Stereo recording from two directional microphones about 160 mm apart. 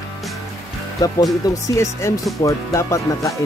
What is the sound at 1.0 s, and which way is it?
Speech, 20° left (ahead or behind).